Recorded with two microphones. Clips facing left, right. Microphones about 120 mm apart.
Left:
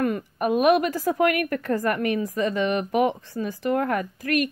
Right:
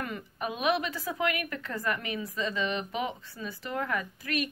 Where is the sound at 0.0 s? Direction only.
50° left (ahead or behind).